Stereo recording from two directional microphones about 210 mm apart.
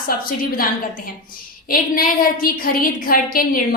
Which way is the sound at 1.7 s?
40° left (ahead or behind).